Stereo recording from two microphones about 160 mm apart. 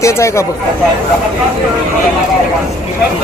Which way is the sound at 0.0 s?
20° left (ahead or behind).